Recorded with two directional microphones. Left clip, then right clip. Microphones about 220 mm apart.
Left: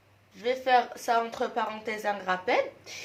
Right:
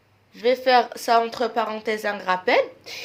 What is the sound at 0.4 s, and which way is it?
A woman's voice, 45° right (ahead or behind).